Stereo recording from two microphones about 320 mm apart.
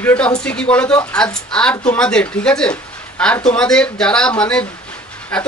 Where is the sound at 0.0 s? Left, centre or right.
Centre.